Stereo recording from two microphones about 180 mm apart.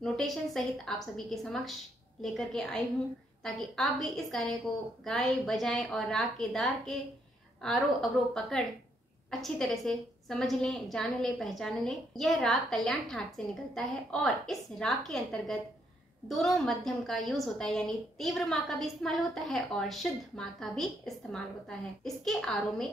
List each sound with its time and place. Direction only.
0.0 s a woman's voice: centre (ahead or behind)